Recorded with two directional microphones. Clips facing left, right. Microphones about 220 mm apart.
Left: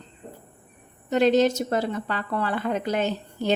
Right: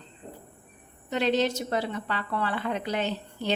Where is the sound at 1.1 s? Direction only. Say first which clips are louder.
Left 6 dB; 45° left (ahead or behind).